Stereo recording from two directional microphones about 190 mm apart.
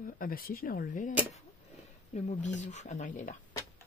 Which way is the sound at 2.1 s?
40° left (ahead or behind).